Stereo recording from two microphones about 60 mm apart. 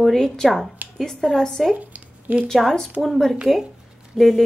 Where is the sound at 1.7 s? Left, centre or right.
Right.